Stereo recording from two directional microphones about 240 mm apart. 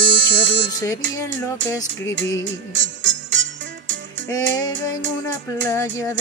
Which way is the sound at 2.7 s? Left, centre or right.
Right.